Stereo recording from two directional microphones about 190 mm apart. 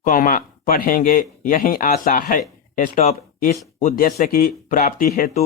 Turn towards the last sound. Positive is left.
turn(degrees=45)  # may be behind; listen again after turning